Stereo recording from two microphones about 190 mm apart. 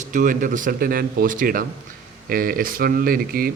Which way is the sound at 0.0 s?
45° right (ahead or behind).